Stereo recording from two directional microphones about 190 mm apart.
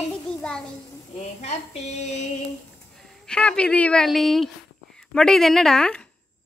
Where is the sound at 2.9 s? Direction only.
Centre (ahead or behind).